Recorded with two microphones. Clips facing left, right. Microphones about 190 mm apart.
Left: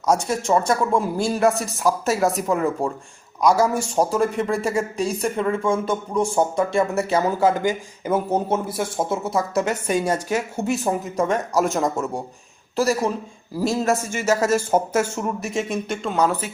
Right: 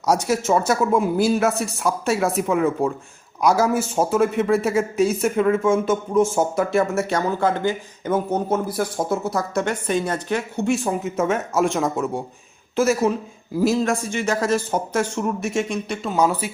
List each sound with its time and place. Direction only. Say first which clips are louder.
0.3 s a man's voice: right 1 dB; 5° right (ahead or behind); by 8.2 s 10° left (ahead or behind)
8.3 s speech: even; 25° left (ahead or behind)
9.2 s a woman's voice: left 1 dB; centre (ahead or behind)